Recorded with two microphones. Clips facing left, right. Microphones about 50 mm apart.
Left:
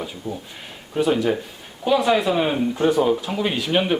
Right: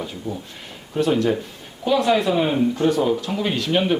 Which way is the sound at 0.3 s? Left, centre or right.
Centre.